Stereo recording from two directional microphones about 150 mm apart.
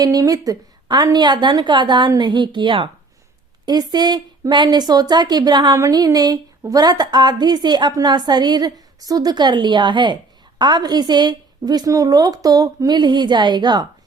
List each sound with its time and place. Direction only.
0.0 s a woman's voice: 25° right (ahead or behind)